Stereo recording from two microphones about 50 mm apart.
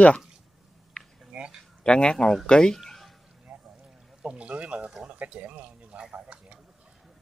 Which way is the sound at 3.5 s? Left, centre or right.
Right.